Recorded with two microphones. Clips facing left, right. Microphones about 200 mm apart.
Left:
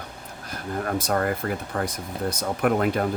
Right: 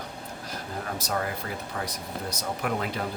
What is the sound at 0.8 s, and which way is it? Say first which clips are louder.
Speech: left 7 dB; 55° left (ahead or behind).